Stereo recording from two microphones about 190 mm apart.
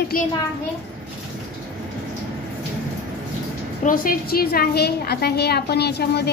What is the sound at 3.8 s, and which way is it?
A woman's voice, 45° left (ahead or behind).